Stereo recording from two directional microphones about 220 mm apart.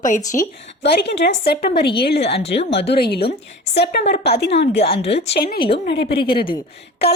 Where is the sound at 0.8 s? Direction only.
50° left (ahead or behind).